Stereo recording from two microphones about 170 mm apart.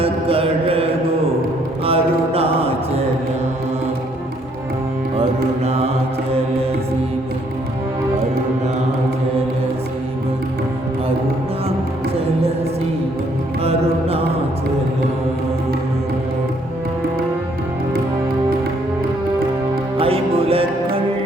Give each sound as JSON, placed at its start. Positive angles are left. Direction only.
{"t": 0.0, "sound": "mantra", "side_deg": -35}
{"t": 5.1, "sound": "mantra", "side_deg": -35}
{"t": 13.7, "sound": "mantra", "side_deg": -35}
{"t": 20.0, "sound": "music", "side_deg": -35}